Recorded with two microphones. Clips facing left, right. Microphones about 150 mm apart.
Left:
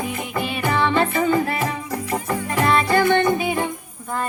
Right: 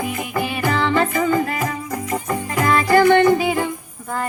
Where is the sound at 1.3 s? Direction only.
30° left (ahead or behind).